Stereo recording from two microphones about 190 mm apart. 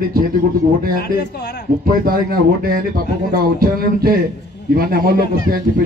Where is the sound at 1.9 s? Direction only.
50° right (ahead or behind).